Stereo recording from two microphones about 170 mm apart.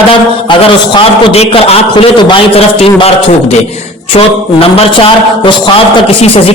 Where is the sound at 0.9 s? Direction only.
35° left (ahead or behind).